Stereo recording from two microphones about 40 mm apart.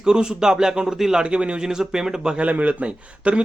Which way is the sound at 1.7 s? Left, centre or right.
Centre.